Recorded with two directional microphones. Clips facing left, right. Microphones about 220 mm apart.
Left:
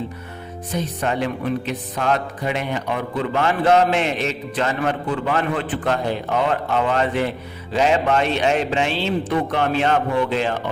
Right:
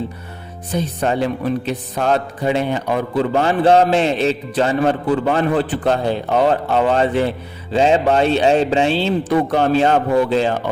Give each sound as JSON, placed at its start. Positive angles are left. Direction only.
{"t": 0.7, "sound": "music", "side_deg": -35}